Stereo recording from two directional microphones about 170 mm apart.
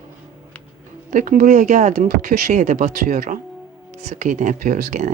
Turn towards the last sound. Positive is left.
turn(degrees=-45)  # may be behind; listen again after turning